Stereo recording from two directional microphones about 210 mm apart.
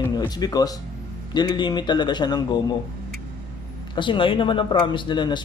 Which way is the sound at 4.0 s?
25° left (ahead or behind).